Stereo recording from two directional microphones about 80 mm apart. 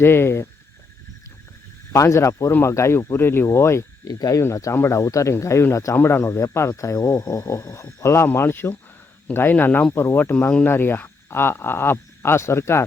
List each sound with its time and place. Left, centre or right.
0.0 s speech: left
1.9 s speech: left
4.0 s speech: left